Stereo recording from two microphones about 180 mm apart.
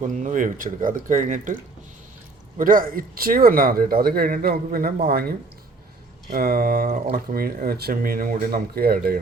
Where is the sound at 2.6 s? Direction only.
50° right (ahead or behind).